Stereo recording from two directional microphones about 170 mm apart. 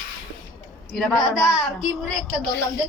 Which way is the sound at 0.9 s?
Centre (ahead or behind).